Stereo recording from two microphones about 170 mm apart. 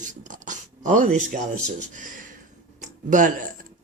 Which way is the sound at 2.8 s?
50° right (ahead or behind).